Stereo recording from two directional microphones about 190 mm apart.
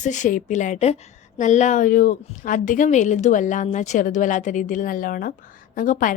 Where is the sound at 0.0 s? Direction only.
40° left (ahead or behind).